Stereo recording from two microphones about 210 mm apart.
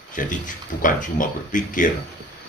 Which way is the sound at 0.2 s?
40° left (ahead or behind).